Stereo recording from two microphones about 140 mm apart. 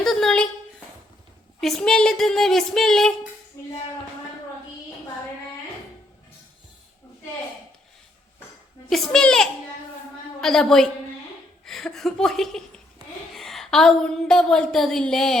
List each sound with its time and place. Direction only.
0.0 s a sound: 5° left (ahead or behind)
1.6 s speech: 5° left (ahead or behind)
3.6 s tambourine: 25° left (ahead or behind)
8.9 s a woman's voice: 5° left (ahead or behind)